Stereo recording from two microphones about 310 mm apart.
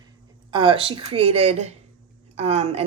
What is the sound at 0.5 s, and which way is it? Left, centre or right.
A woman's voice, centre.